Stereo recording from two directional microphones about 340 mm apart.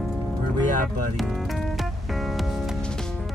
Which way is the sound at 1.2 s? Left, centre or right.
Centre.